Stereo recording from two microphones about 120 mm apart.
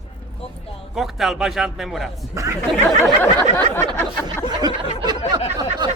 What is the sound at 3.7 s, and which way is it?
Speech, 15° left (ahead or behind).